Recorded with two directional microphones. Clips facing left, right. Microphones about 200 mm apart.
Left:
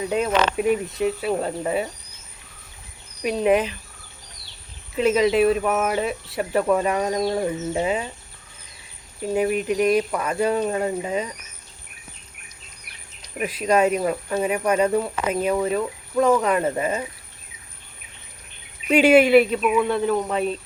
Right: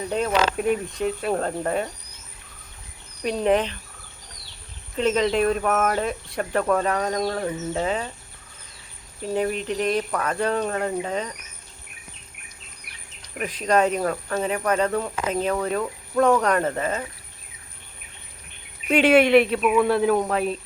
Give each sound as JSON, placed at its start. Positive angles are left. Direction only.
{"t": 0.5, "sound": "speech", "side_deg": 5}
{"t": 3.2, "sound": "speech", "side_deg": 5}
{"t": 4.9, "sound": "speech", "side_deg": 5}
{"t": 9.3, "sound": "speech", "side_deg": 10}
{"t": 13.4, "sound": "speech", "side_deg": 10}
{"t": 18.9, "sound": "speech", "side_deg": 5}